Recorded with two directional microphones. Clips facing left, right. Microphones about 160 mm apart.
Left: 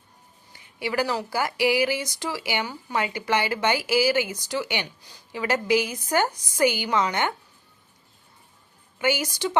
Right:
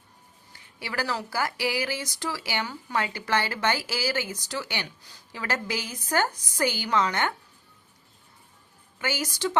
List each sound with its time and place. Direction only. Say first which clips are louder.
0.5 s speech: left 7 dB; 15° left (ahead or behind)
9.0 s speech: left 5 dB; 15° left (ahead or behind)